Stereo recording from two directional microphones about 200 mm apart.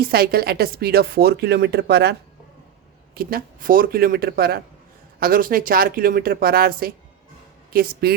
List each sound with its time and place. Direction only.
0.0 s a woman's voice: 50° right (ahead or behind)
3.2 s a woman's voice: 45° right (ahead or behind)